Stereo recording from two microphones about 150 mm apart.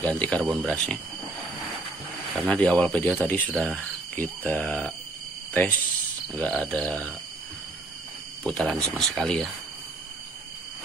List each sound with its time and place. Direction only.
0.1 s speech: 10° left (ahead or behind)
2.3 s speech: 5° left (ahead or behind)
8.5 s speech: 5° left (ahead or behind)